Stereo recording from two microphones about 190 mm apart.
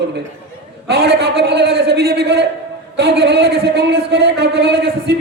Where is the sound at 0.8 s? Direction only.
60° right (ahead or behind).